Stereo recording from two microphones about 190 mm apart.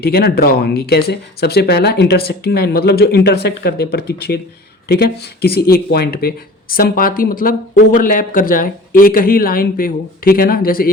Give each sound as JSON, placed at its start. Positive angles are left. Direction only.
{"t": 0.0, "sound": "speech", "side_deg": 55}